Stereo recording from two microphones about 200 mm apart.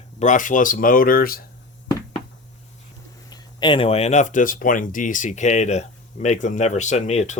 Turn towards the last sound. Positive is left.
turn(degrees=35)  # may be behind; listen again after turning